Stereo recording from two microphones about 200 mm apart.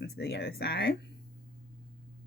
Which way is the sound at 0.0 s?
55° left (ahead or behind).